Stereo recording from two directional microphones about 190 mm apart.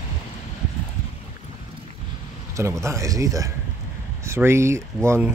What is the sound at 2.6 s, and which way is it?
Speech, 15° right (ahead or behind).